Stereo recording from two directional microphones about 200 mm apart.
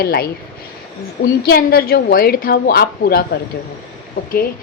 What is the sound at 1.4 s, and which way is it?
A woman's voice, 50° left (ahead or behind).